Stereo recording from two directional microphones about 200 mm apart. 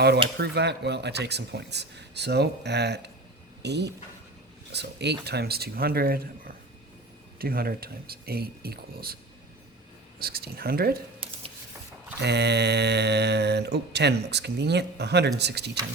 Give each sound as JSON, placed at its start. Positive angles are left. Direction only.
{"t": 0.3, "sound": "speech", "side_deg": -55}
{"t": 10.2, "sound": "speech", "side_deg": -50}
{"t": 12.2, "sound": "speech", "side_deg": -55}